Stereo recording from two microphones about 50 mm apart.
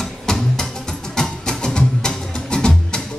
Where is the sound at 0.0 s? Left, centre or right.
Centre.